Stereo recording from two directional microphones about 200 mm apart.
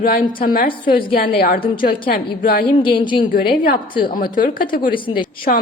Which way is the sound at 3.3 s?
45° left (ahead or behind).